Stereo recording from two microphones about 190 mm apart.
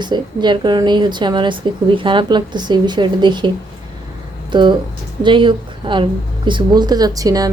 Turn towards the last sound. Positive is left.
turn(degrees=-20)  # may be behind; listen again after turning